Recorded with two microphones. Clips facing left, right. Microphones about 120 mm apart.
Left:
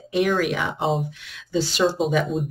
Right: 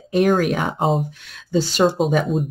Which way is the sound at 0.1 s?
45° right (ahead or behind).